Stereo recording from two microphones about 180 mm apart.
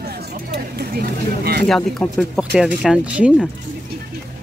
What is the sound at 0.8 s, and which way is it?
Speech, 60° right (ahead or behind).